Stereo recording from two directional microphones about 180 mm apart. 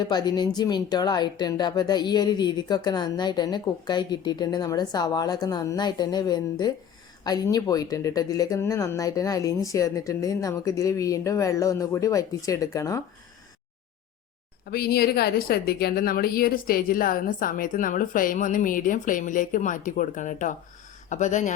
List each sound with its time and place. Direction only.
0.0 s speech: 25° left (ahead or behind)
14.6 s a woman's voice: 60° left (ahead or behind); by 21.5 s 40° left (ahead or behind)